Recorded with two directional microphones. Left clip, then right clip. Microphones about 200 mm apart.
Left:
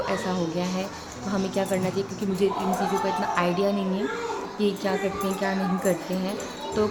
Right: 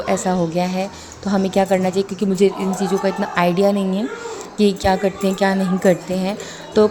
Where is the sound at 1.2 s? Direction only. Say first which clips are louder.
Right 10 dB; 35° right (ahead or behind).